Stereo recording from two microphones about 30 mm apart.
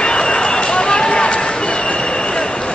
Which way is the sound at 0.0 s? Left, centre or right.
Left.